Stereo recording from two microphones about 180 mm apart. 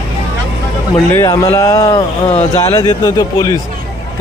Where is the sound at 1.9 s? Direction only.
35° left (ahead or behind).